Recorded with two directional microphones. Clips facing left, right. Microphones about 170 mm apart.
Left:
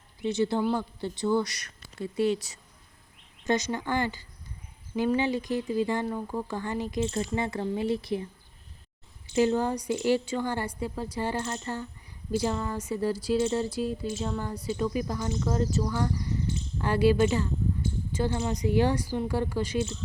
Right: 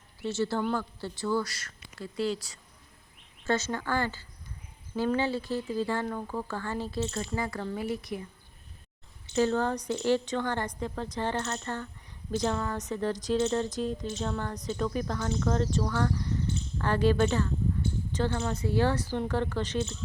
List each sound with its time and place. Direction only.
0.2 s speech: 15° left (ahead or behind)
3.4 s a woman's voice: 15° left (ahead or behind)
9.3 s a woman's voice: 15° left (ahead or behind)